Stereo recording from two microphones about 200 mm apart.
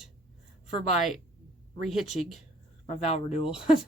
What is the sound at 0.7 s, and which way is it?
Speech, 30° left (ahead or behind).